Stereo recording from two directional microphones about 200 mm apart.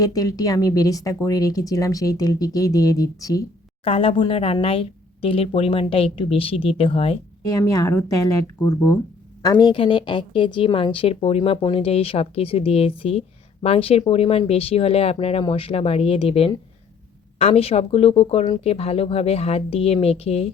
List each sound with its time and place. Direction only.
0.0 s speech: 15° left (ahead or behind)
3.8 s a woman's voice: 30° left (ahead or behind)
7.4 s a woman's voice: 20° left (ahead or behind)